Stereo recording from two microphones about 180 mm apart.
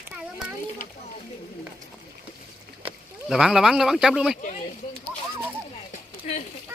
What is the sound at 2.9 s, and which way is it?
Speech, 5° right (ahead or behind).